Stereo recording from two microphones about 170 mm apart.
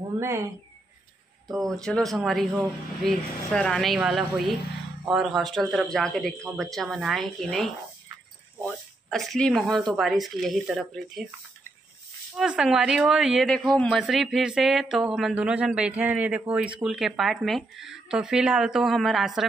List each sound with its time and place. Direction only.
0.2 s speech: 15° right (ahead or behind)
1.5 s speech: centre (ahead or behind)
12.4 s speech: 5° right (ahead or behind)